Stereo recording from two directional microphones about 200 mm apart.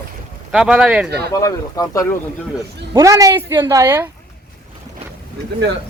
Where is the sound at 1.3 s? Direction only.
15° left (ahead or behind).